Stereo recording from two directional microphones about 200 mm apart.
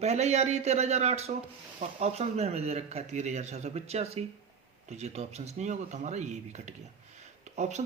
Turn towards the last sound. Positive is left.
turn(degrees=-35)  # may be behind; listen again after turning